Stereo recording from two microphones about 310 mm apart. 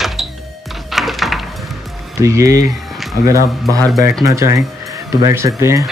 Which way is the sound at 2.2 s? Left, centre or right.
Centre.